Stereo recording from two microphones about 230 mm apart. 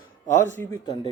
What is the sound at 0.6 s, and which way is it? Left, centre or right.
Speech, centre.